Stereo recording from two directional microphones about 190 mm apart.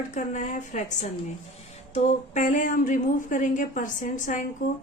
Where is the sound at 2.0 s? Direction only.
40° left (ahead or behind).